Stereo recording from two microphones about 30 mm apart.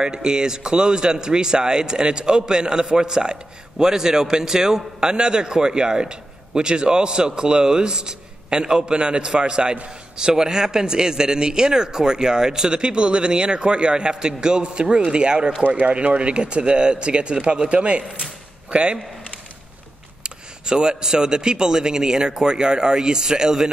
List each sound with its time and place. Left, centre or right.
0.0 s a man's voice: right
15.7 s speech: right
20.2 s a man's voice: right